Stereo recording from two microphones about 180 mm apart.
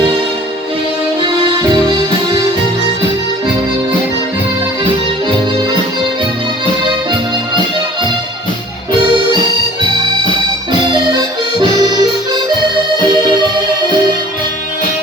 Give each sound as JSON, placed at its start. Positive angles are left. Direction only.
{"t": 10.7, "sound": "accordion", "side_deg": -25}
{"t": 13.0, "sound": "music", "side_deg": -25}